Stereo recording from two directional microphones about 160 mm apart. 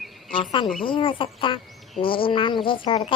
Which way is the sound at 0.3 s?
30° left (ahead or behind).